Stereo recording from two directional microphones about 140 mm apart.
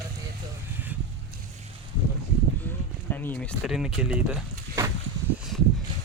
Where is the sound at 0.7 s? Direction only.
10° right (ahead or behind).